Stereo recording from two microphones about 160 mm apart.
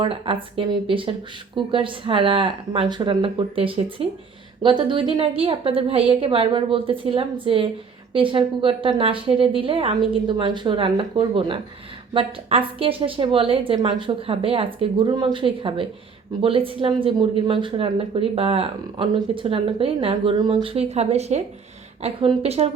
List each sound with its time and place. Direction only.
0.0 s speech: 35° right (ahead or behind)